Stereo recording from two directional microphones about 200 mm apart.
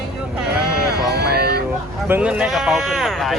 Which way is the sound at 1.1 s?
55° right (ahead or behind).